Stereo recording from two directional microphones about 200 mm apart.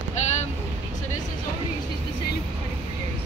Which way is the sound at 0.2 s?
35° left (ahead or behind).